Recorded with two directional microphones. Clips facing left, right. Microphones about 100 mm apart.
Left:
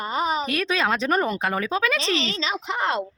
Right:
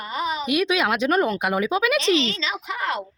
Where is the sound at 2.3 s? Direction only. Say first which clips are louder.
Left 2 dB; 30° left (ahead or behind).